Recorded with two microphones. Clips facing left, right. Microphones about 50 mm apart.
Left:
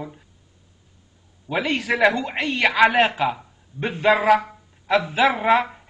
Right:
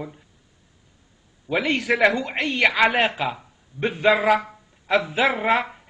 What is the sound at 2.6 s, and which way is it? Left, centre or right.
Speech, centre.